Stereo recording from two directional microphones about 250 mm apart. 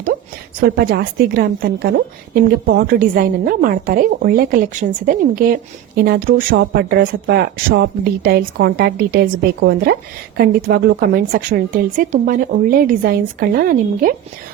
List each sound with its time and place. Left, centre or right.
0.6 s speech: right